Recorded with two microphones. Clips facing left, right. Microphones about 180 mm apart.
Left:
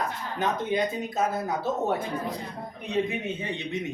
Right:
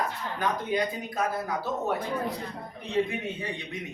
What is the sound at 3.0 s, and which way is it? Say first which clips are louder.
Speech: left 2 dB; 20° left (ahead or behind).